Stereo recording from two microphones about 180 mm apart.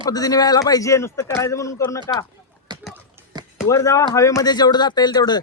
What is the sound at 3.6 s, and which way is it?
Speech, 15° left (ahead or behind).